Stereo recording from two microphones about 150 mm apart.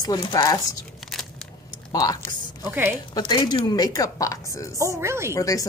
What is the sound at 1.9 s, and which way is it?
Speech, 25° left (ahead or behind).